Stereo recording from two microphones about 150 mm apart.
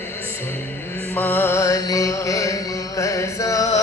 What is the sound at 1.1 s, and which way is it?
Music, 10° left (ahead or behind).